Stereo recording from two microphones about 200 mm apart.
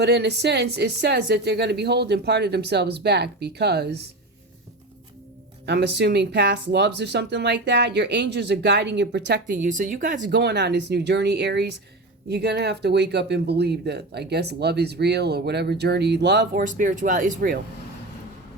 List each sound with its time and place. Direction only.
0.0 s speech: 55° right (ahead or behind)
5.6 s speech: 55° right (ahead or behind)
9.5 s speech: 40° right (ahead or behind)
10.3 s speech: 55° right (ahead or behind)